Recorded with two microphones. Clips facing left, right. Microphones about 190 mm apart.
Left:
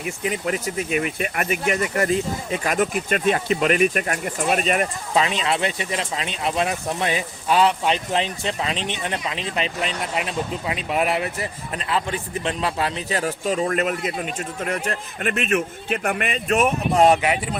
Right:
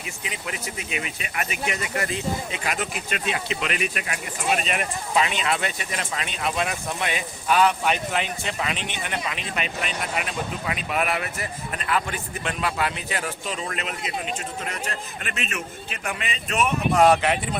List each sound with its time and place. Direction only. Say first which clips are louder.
0.0 s speech: left 9 dB; 45° left (ahead or behind)
16.9 s speech: left 1 dB; 25° left (ahead or behind)
17.2 s speech: left 1 dB; 10° left (ahead or behind)